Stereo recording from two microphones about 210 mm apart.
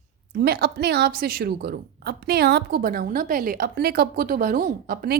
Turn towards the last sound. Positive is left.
turn(degrees=-40)  # may be behind; listen again after turning